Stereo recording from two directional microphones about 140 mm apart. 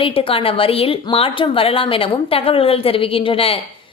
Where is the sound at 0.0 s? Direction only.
40° left (ahead or behind).